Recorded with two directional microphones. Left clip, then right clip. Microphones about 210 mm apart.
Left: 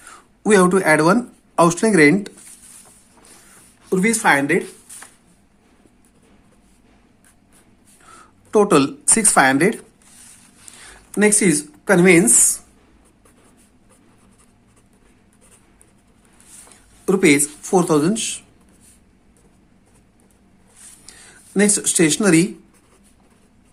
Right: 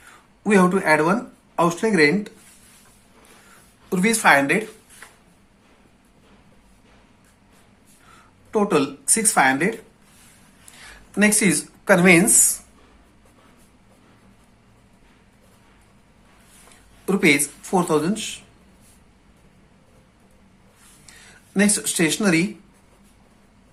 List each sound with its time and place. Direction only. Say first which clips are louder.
0.1 s speech: left 4 dB; 40° left (ahead or behind)
3.8 s speech: left 1 dB; 30° left (ahead or behind)
8.0 s speech: left 6 dB; 40° left (ahead or behind)
17.1 s speech: left 3 dB; 30° left (ahead or behind)
21.1 s speech: left 5 dB; 35° left (ahead or behind)